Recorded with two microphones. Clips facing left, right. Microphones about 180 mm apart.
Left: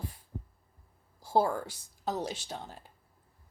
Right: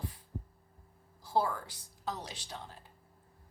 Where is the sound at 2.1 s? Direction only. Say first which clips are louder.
Left 7 dB; 45° left (ahead or behind).